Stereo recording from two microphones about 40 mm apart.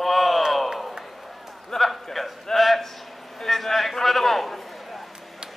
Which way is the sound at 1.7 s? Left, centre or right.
Centre.